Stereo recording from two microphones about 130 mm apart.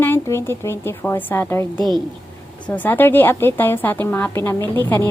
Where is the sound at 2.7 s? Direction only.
15° left (ahead or behind).